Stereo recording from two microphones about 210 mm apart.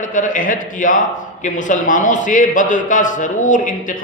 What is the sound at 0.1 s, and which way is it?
A man's voice, 40° left (ahead or behind).